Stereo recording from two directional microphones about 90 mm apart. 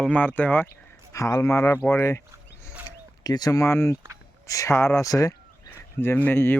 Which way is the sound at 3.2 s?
45° left (ahead or behind).